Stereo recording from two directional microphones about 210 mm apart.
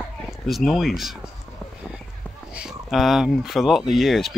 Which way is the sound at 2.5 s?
Centre (ahead or behind).